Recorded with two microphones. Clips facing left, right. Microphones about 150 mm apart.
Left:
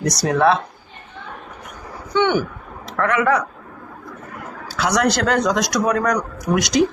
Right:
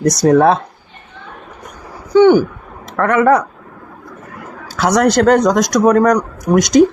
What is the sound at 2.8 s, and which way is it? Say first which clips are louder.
Speech: right 6 dB; 50° right (ahead or behind).